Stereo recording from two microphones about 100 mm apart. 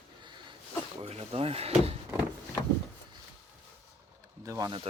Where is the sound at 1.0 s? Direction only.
85° right.